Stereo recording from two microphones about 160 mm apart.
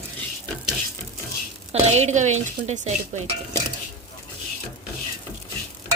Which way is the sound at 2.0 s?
45° right (ahead or behind).